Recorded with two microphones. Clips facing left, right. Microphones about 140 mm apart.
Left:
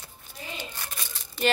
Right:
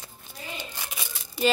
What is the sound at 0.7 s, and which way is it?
Crumpling, 10° right (ahead or behind).